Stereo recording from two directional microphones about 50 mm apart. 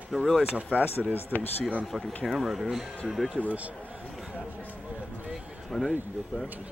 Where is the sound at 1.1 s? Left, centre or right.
Left.